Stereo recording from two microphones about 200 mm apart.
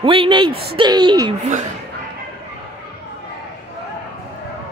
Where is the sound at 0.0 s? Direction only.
25° right (ahead or behind).